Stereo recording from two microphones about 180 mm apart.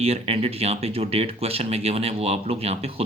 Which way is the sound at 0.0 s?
35° right (ahead or behind).